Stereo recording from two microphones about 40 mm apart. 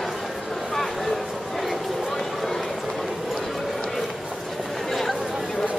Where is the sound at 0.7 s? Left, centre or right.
Centre.